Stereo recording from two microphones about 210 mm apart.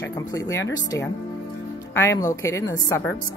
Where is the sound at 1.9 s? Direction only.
15° left (ahead or behind).